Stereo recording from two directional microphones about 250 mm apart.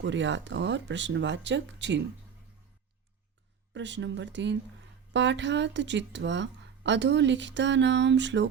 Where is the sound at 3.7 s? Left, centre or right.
Right.